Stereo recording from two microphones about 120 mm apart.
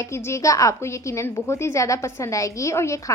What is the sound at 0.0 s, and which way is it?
A woman's voice, 20° left (ahead or behind).